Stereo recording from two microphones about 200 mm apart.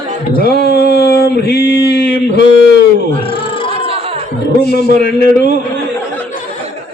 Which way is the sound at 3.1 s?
25° left (ahead or behind).